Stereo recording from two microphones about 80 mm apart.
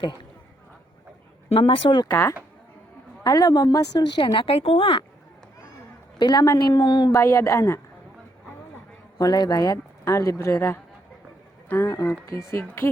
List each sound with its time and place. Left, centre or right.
1.6 s speech: left
2.0 s speech: left
3.2 s speech: left
6.1 s a woman's voice: left
7.1 s speech: left
9.1 s speech: left